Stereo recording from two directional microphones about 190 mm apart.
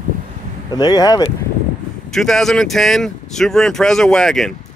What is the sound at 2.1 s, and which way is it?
Speech, centre (ahead or behind).